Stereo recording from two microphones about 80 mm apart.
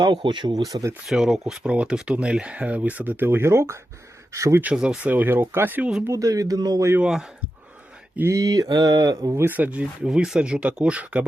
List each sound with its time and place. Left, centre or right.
0.0 s speech: right
1.0 s speech: centre; by 4.6 s right
4.6 s speech: centre
5.1 s speech: right
6.1 s mantra: right
7.0 s speech: centre
8.3 s mantra: right
9.3 s speech: right